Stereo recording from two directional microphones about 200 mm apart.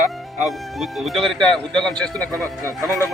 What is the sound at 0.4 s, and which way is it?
Speech, centre (ahead or behind).